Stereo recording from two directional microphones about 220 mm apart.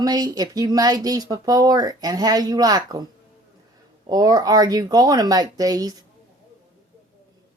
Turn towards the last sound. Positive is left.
turn(degrees=-15)  # may be behind; listen again after turning